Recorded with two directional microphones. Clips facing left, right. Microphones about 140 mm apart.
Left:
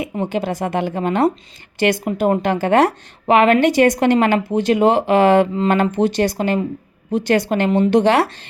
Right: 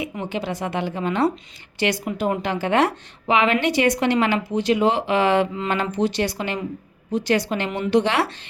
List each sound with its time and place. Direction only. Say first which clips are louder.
0.0 s a woman's voice: left 6 dB; 45° left (ahead or behind)